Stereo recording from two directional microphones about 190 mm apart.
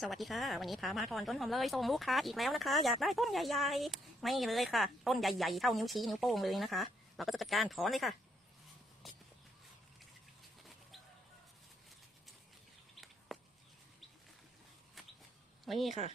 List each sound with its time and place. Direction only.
0.0 s speech: centre (ahead or behind)
9.0 s walk: centre (ahead or behind)
12.9 s a sound: centre (ahead or behind)
15.6 s speech: centre (ahead or behind)